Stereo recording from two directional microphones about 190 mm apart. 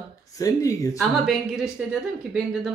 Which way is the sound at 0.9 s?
Centre (ahead or behind).